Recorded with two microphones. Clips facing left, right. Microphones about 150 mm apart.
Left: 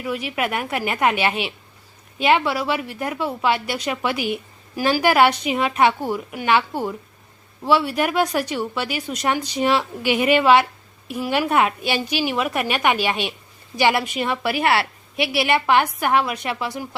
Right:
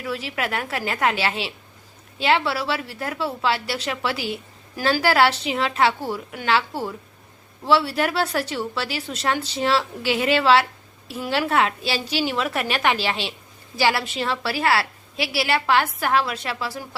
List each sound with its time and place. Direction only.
0.0 s a woman's voice: 15° left (ahead or behind)